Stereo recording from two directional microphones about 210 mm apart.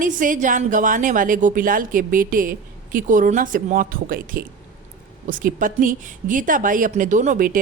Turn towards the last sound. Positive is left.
turn(degrees=-40)  # may be behind; listen again after turning